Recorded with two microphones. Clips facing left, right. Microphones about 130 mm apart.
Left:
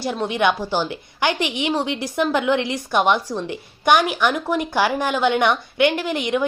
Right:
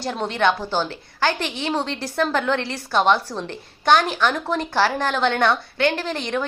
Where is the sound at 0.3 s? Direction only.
15° left (ahead or behind).